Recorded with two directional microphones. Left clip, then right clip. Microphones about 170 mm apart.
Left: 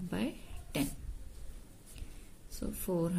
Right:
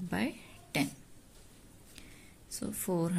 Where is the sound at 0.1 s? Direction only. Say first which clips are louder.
Right 3 dB; 15° right (ahead or behind).